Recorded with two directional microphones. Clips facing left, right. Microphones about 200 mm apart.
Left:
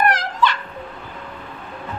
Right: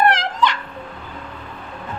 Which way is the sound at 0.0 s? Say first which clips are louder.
Right 2 dB; 25° right (ahead or behind).